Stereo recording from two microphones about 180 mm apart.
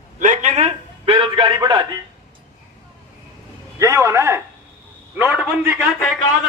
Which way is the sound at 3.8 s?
15° right (ahead or behind).